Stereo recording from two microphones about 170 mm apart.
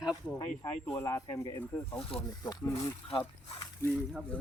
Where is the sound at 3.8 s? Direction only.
15° left (ahead or behind).